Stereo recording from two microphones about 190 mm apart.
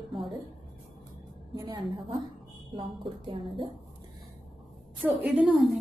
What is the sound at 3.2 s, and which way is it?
Speech, 25° right (ahead or behind).